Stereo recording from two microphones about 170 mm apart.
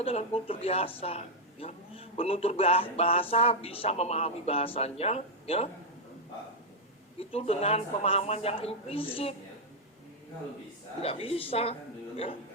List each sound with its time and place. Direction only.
0.0 s a woman's voice: 35° left (ahead or behind)
7.2 s a woman's voice: 35° left (ahead or behind)
11.0 s a woman's voice: 35° left (ahead or behind)